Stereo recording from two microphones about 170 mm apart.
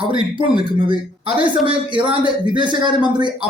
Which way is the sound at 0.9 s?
30° right (ahead or behind).